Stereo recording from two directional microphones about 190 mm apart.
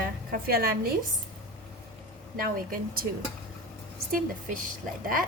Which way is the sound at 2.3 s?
50° right (ahead or behind).